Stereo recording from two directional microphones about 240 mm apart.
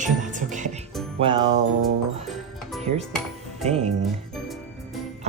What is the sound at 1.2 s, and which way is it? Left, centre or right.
Music, right.